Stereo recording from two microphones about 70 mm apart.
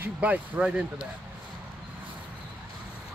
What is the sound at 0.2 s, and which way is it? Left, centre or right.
Speech, right.